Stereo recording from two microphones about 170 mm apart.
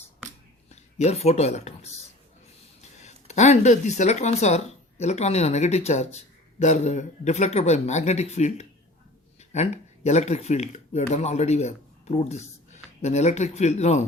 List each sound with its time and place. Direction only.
0.7 s speech: 40° left (ahead or behind)
3.0 s speech: 40° left (ahead or behind)